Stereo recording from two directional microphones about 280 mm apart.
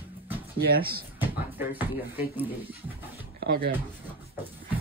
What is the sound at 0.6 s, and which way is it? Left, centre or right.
Speech, right.